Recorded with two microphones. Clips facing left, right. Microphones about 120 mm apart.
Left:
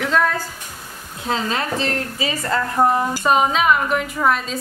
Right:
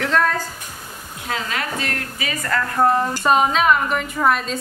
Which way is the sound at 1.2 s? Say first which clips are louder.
Left 4 dB; 30° left (ahead or behind).